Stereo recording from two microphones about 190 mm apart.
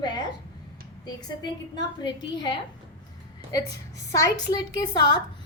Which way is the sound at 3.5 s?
20° left (ahead or behind).